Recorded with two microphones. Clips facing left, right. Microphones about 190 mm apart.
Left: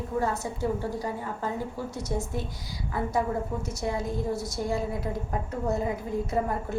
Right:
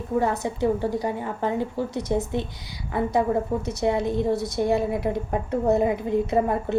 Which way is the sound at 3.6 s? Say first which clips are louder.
Right 7 dB; 65° right (ahead or behind).